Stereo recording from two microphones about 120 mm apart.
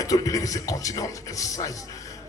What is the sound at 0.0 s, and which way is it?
Speech, 30° left (ahead or behind).